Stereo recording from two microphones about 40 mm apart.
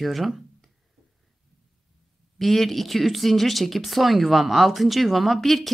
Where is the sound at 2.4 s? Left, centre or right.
Centre.